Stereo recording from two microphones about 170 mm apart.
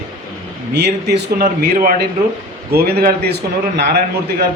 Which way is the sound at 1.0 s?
85° right.